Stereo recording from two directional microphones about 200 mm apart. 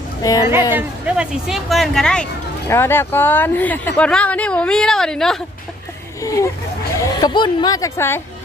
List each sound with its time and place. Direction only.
0.2 s speech: 15° left (ahead or behind)
0.7 s speech: 10° right (ahead or behind)
6.2 s speech: 15° left (ahead or behind)